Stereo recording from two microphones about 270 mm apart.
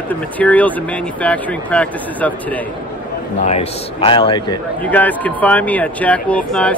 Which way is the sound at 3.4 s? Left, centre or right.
Left.